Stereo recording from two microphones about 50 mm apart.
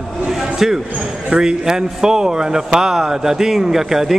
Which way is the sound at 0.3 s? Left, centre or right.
Centre.